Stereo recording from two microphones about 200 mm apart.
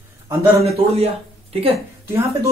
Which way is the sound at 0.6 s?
30° right (ahead or behind).